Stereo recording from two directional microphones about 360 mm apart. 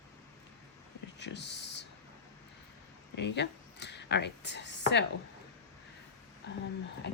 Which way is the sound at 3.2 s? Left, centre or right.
Left.